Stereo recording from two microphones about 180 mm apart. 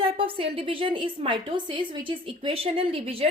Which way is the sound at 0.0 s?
30° right (ahead or behind).